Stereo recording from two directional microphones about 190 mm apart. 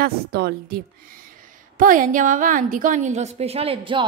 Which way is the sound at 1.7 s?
45° right (ahead or behind).